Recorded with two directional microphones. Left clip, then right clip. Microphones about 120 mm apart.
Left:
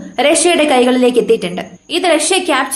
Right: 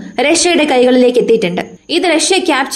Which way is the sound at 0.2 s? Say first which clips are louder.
Even; 50° right (ahead or behind).